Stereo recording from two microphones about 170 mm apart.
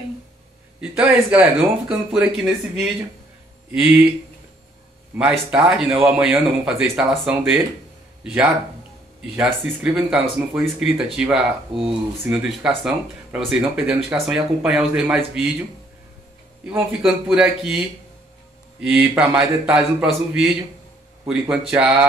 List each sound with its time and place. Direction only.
0.7 s speech: 5° right (ahead or behind)
5.7 s speech: 5° right (ahead or behind)
16.6 s speech: 5° right (ahead or behind)
18.8 s speech: 5° right (ahead or behind)